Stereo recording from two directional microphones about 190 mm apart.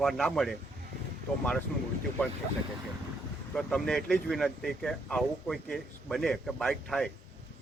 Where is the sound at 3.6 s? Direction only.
5° left (ahead or behind).